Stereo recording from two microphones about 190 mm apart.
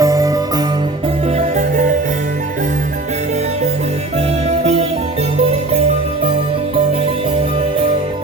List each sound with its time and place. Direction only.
0.0 s music: 20° right (ahead or behind)
1.4 s music: 40° right (ahead or behind)
4.4 s music: 35° right (ahead or behind)